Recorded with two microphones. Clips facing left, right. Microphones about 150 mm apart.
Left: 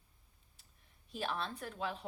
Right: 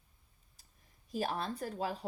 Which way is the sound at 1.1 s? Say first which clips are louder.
Right 4 dB; 40° right (ahead or behind).